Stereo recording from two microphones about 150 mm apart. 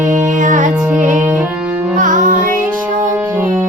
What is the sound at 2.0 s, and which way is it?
Music, 60° right (ahead or behind).